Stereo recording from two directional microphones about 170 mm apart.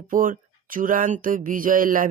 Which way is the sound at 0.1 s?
55° right (ahead or behind).